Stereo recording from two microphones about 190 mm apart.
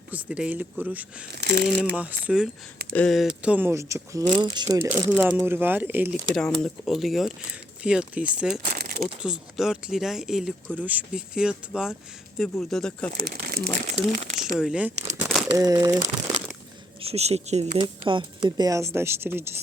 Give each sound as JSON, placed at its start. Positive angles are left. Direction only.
{"t": 0.1, "sound": "a woman's voice", "side_deg": -5}
{"t": 1.3, "sound": "speech", "side_deg": -60}
{"t": 1.8, "sound": "a woman's voice", "side_deg": -10}
{"t": 4.8, "sound": "a woman's voice", "side_deg": -10}
{"t": 6.3, "sound": "speech", "side_deg": 5}
{"t": 8.8, "sound": "a sound", "side_deg": -50}
{"t": 9.2, "sound": "speech", "side_deg": -5}
{"t": 13.1, "sound": "speech", "side_deg": -50}
{"t": 14.6, "sound": "speech", "side_deg": -5}
{"t": 15.5, "sound": "a woman's voice", "side_deg": -20}
{"t": 17.0, "sound": "a woman's voice", "side_deg": -30}